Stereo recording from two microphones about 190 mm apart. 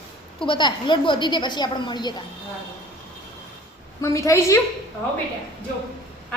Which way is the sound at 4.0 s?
15° left (ahead or behind).